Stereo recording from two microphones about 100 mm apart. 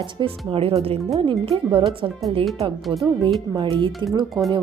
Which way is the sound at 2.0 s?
50° right (ahead or behind).